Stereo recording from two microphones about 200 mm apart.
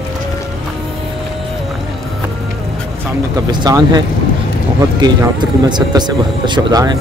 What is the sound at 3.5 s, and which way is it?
Speech, 20° right (ahead or behind).